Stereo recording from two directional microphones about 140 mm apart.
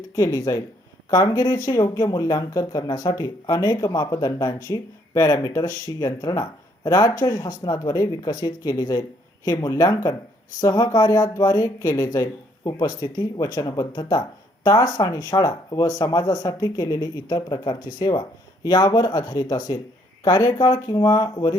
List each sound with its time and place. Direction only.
0.2 s speech: 25° left (ahead or behind)